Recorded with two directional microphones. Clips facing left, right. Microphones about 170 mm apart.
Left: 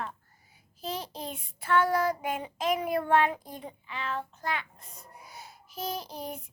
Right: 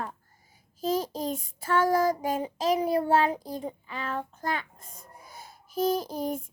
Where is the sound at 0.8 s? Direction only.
45° right (ahead or behind).